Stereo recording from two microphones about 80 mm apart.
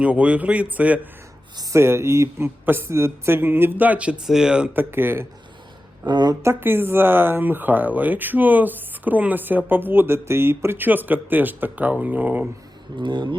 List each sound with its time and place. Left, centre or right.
0.0 s a man's voice: centre
1.7 s a man's voice: right; by 4.7 s centre
4.7 s speech: right
6.1 s speech: right
6.4 s speech: right
13.0 s speech: right